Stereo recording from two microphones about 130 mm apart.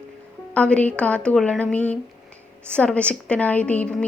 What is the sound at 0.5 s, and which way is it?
A woman's voice, 10° left (ahead or behind).